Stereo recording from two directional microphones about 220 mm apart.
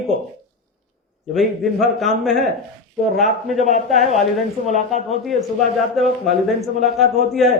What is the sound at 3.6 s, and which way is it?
Speech, 35° left (ahead or behind).